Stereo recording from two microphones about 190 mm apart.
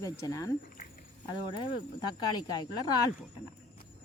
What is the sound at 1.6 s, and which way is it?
A woman's voice, 20° left (ahead or behind).